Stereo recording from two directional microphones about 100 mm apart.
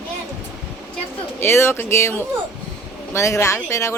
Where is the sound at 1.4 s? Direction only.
25° left (ahead or behind).